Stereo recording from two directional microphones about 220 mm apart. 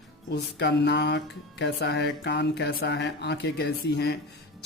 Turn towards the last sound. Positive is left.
turn(degrees=50)  # may be behind; listen again after turning